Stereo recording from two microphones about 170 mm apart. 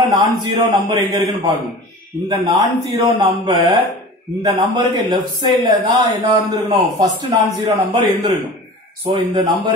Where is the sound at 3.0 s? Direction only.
30° right (ahead or behind).